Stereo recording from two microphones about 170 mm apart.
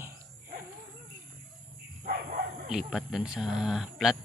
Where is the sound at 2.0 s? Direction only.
55° right (ahead or behind).